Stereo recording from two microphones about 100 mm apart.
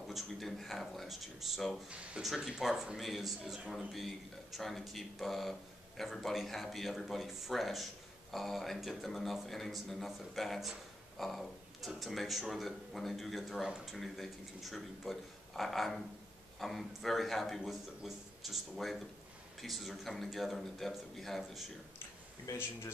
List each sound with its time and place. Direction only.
0.1 s speech: centre (ahead or behind)
22.5 s speech: 30° left (ahead or behind)